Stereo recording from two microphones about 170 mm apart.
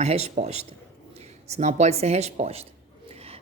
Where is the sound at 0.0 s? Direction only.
40° right (ahead or behind).